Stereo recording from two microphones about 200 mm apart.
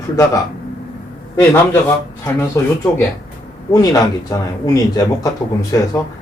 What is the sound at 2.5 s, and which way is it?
Speech, 15° left (ahead or behind).